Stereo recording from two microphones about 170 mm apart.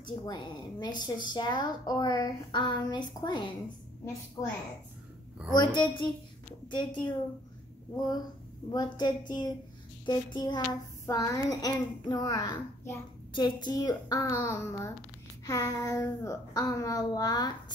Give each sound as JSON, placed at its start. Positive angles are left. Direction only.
{"t": 0.0, "sound": "a woman's voice", "side_deg": 25}
{"t": 8.7, "sound": "a woman's voice", "side_deg": 25}